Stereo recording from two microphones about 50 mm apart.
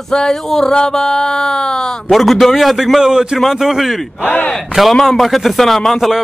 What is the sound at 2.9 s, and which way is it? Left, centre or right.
Speech, centre.